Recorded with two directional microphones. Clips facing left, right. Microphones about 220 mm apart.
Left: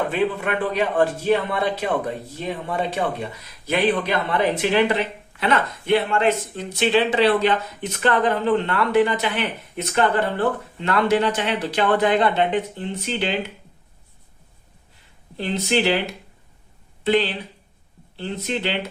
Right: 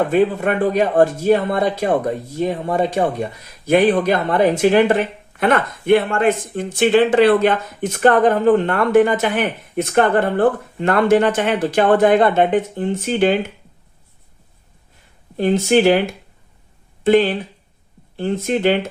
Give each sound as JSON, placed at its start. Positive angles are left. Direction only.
{"t": 0.1, "sound": "speech", "side_deg": -45}
{"t": 15.4, "sound": "speech", "side_deg": -50}